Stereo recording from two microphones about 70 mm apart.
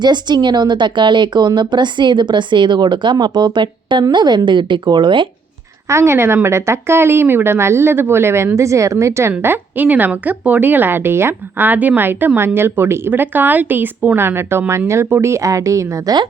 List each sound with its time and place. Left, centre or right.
0.0 s a woman's voice: right
5.9 s speech: right
8.5 s speech: right
9.4 s speech: right